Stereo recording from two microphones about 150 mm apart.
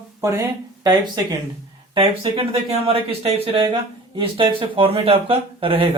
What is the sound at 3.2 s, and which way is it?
A man's voice, 40° right (ahead or behind).